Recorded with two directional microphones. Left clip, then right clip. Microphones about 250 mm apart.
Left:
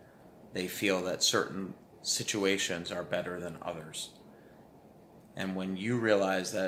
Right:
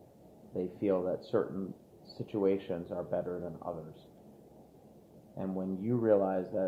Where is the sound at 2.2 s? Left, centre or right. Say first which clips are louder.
Even; left.